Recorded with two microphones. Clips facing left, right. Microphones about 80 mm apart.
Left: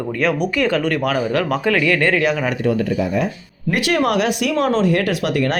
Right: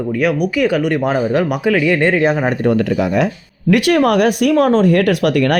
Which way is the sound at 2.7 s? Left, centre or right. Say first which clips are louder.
Right 3 dB; right.